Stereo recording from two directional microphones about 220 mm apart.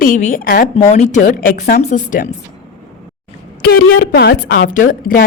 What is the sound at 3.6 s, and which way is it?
A woman's voice, 45° left (ahead or behind).